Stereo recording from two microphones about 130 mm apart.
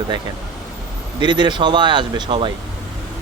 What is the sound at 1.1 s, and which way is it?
Speech, 35° right (ahead or behind).